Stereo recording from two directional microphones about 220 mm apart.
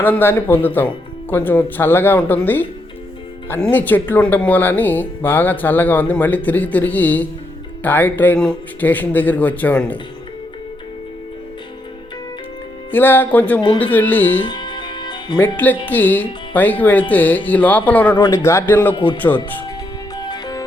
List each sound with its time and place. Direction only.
0.0 s speech: 10° left (ahead or behind)
12.9 s speech: 10° left (ahead or behind)
14.4 s music: 20° left (ahead or behind)
15.5 s speech: 10° left (ahead or behind)
20.2 s music: 20° left (ahead or behind)